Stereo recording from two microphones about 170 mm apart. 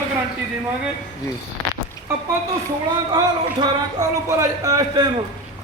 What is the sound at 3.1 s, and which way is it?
A man's voice, 25° right (ahead or behind).